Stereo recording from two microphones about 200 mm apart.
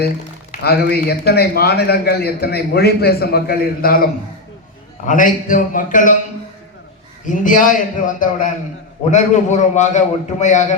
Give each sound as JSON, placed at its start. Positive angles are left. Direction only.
{"t": 0.5, "sound": "a man's voice", "side_deg": 50}
{"t": 7.3, "sound": "a man's voice", "side_deg": 40}